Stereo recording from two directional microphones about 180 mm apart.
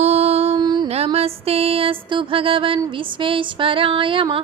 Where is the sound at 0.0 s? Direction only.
35° right (ahead or behind).